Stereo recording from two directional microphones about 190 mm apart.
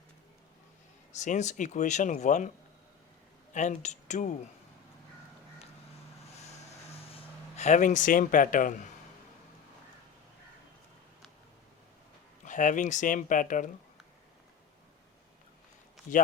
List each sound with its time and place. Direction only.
1.1 s speech: 40° left (ahead or behind)
3.5 s speech: 40° left (ahead or behind)
6.3 s a sound: 35° left (ahead or behind)
12.5 s speech: 40° left (ahead or behind)